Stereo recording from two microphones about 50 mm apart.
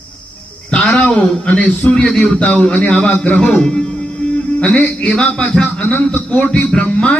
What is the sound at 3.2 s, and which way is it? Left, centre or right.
Music, centre.